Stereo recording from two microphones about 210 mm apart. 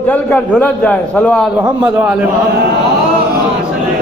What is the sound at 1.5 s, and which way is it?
Speech, 5° right (ahead or behind).